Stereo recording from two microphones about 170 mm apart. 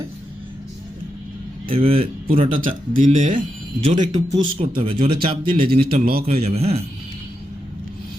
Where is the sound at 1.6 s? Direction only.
35° right (ahead or behind).